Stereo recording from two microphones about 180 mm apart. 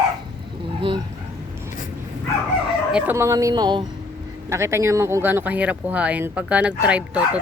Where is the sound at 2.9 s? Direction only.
10° right (ahead or behind).